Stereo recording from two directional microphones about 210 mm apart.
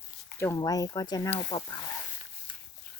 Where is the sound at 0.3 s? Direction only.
15° left (ahead or behind).